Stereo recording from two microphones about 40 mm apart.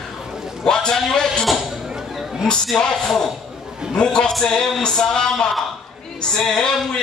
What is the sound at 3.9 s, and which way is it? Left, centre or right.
A man's voice, centre.